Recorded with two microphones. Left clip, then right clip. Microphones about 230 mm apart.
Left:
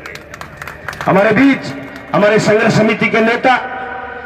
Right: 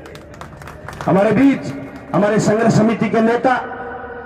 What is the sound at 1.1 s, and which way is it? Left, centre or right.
A man's voice, centre.